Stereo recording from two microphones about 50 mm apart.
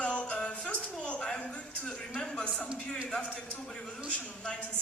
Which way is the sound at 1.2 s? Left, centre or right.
Centre.